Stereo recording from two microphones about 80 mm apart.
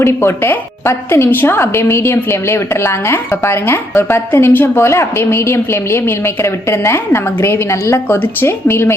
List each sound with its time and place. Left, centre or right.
0.0 s a woman's voice: left